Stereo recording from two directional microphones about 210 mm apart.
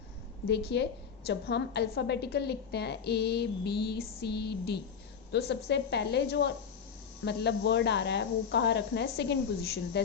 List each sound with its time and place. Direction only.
0.4 s a woman's voice: 50° left (ahead or behind)